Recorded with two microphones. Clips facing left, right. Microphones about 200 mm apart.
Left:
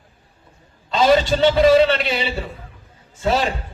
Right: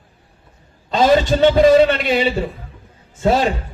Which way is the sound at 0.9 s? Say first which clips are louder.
Right 2 dB; 45° right (ahead or behind).